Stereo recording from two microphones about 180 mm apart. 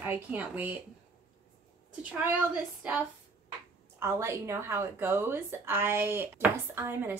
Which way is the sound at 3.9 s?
15° right (ahead or behind).